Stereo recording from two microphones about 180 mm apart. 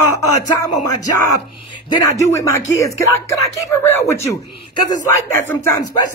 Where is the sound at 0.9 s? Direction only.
20° left (ahead or behind).